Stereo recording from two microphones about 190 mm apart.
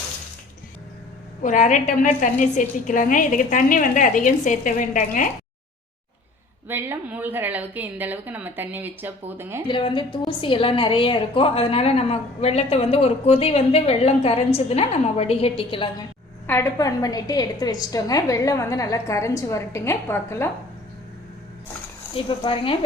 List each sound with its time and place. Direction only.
1.4 s a woman's voice: 40° left (ahead or behind)
6.7 s a woman's voice: 10° right (ahead or behind)
9.6 s a woman's voice: 25° left (ahead or behind)
16.5 s a woman's voice: 15° left (ahead or behind)
22.1 s speech: 30° left (ahead or behind)